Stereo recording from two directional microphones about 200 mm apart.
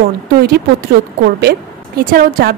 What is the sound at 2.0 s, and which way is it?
Speech, 45° right (ahead or behind).